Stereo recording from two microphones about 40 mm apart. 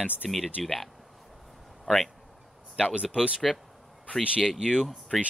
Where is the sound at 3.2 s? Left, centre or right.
Centre.